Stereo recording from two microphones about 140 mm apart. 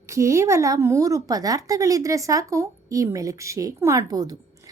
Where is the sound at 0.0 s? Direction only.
20° right (ahead or behind).